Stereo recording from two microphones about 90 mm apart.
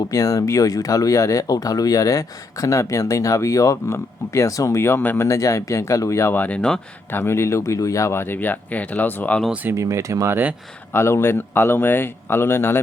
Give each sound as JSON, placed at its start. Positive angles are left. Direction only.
{"t": 0.1, "sound": "speech", "side_deg": 40}
{"t": 7.1, "sound": "speech", "side_deg": 25}
{"t": 9.7, "sound": "speech", "side_deg": -35}
{"t": 10.9, "sound": "speech", "side_deg": 30}